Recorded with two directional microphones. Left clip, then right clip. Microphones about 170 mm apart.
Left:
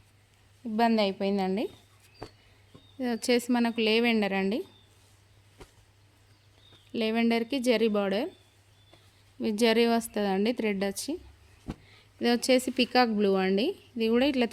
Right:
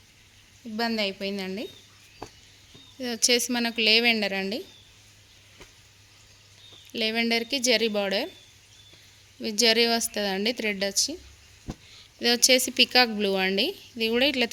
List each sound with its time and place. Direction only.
0.8 s a woman's voice: 60° left (ahead or behind)
3.0 s a woman's voice: 50° left (ahead or behind)
6.9 s a woman's voice: 45° left (ahead or behind)
9.4 s a woman's voice: 50° left (ahead or behind)